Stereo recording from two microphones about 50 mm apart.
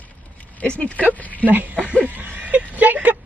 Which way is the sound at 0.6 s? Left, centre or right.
Left.